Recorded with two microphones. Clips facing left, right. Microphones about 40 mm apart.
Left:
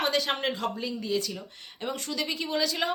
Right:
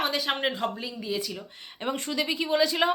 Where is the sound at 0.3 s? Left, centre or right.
Centre.